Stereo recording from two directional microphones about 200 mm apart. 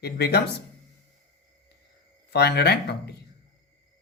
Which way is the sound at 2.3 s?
55° left (ahead or behind).